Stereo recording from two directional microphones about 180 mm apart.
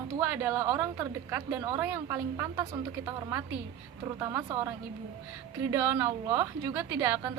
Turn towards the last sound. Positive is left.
turn(degrees=-15)  # may be behind; listen again after turning